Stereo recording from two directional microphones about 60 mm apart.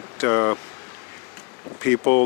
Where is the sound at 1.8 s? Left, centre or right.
Left.